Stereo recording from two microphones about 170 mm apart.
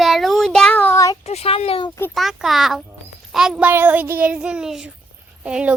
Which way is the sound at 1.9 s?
15° left (ahead or behind).